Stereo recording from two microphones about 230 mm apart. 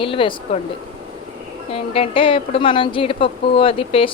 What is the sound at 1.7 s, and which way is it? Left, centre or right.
Speech, left.